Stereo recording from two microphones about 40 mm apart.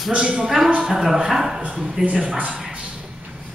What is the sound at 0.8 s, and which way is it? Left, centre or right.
Speech, centre.